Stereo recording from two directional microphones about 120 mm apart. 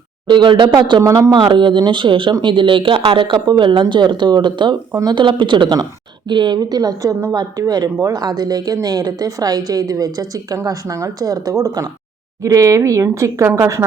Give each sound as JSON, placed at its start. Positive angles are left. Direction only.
{"t": 0.3, "sound": "a woman's voice", "side_deg": -40}
{"t": 1.0, "sound": "speech", "side_deg": -25}
{"t": 1.3, "sound": "a woman's voice", "side_deg": -40}